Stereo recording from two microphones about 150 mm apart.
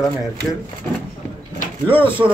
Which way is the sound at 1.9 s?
15° left (ahead or behind).